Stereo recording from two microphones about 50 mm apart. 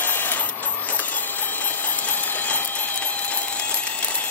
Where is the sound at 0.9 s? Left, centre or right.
Left.